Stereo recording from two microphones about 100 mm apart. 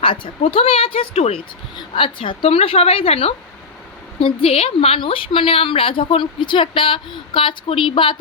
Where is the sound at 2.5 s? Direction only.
90° left.